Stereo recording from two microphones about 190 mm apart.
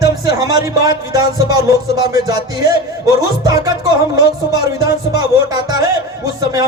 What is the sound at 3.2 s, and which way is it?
Music, 20° right (ahead or behind).